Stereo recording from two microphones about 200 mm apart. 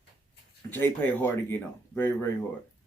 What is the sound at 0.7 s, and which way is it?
Speech, 10° left (ahead or behind).